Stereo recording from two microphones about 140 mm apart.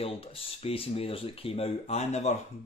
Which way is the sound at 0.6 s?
45° left (ahead or behind).